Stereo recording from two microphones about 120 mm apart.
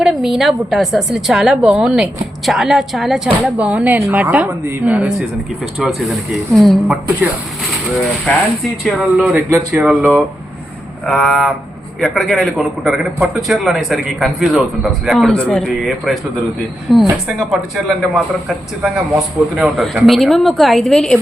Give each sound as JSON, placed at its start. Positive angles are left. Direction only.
{"t": 0.0, "sound": "speech", "side_deg": 0}
{"t": 5.8, "sound": "speech", "side_deg": 0}
{"t": 8.3, "sound": "speech", "side_deg": 10}
{"t": 8.8, "sound": "speech", "side_deg": 0}
{"t": 9.3, "sound": "speech", "side_deg": -15}
{"t": 9.9, "sound": "speech", "side_deg": 0}